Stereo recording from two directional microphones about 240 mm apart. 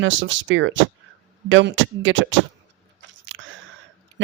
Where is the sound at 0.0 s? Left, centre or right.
Right.